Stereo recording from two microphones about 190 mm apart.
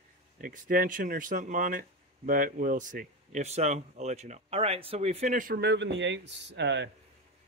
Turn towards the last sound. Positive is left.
turn(degrees=-70)  # may be behind; listen again after turning